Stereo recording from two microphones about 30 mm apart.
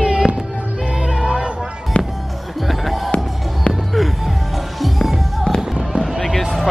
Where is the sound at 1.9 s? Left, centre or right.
Left.